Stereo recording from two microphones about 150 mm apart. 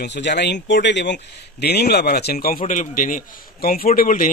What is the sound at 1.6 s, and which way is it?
Speech, 90° left.